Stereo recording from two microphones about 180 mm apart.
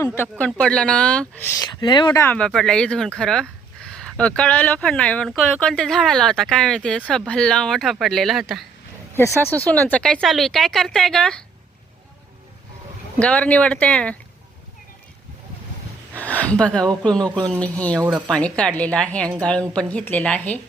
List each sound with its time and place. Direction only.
0.2 s speech: 5° left (ahead or behind)
1.6 s speech: 25° left (ahead or behind)
2.2 s speech: 5° left (ahead or behind)
13.1 s speech: 5° left (ahead or behind)
16.2 s speech: 10° left (ahead or behind)